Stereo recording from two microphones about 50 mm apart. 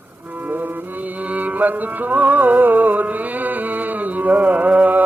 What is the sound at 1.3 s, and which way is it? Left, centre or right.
Music, right.